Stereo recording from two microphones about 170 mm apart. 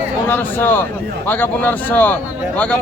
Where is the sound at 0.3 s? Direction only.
10° left (ahead or behind).